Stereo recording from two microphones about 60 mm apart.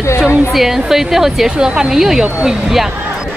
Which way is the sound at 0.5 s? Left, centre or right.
Centre.